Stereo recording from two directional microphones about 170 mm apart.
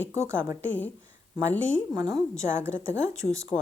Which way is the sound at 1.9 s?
20° right (ahead or behind).